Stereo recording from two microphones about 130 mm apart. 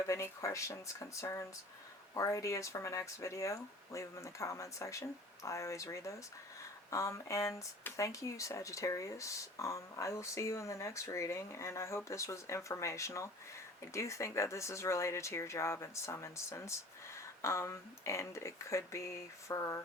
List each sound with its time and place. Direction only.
0.1 s speech: 25° left (ahead or behind)